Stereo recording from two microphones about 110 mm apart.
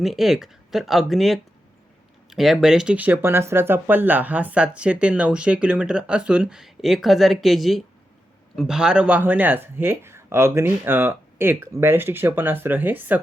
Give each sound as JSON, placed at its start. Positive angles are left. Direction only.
{"t": 0.0, "sound": "speech", "side_deg": 0}